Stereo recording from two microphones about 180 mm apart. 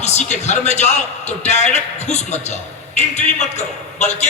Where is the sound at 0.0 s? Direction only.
40° left (ahead or behind).